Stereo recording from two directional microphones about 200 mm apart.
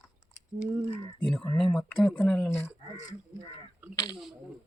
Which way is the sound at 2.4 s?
15° left (ahead or behind).